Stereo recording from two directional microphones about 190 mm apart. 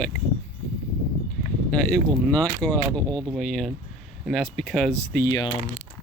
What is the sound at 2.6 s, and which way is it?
Speech, 5° left (ahead or behind).